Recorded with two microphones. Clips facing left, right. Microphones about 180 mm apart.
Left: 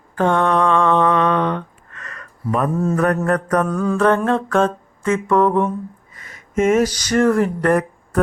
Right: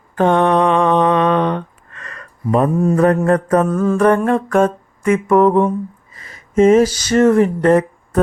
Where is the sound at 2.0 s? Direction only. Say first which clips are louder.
Right 3 dB; 30° right (ahead or behind).